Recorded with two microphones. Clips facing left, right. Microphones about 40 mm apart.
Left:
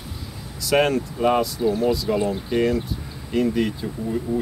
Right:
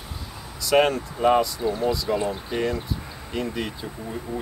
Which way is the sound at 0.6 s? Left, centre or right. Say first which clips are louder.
Even; centre.